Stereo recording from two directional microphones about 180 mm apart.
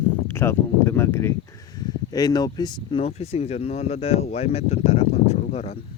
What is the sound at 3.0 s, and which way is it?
Speech, 35° left (ahead or behind).